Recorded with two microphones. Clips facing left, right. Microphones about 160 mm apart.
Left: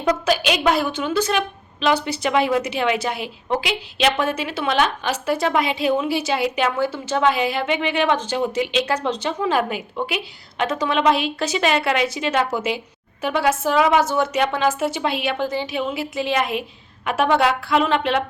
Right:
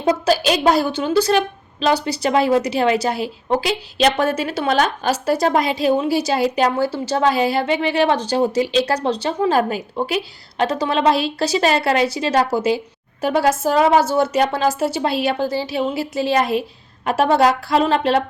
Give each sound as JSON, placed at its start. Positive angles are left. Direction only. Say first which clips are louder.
{"t": 0.0, "sound": "a woman's voice", "louder": "right 3 dB", "side_deg": -30}